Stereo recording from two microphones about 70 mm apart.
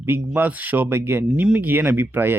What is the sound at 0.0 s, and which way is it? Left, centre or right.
Speech, right.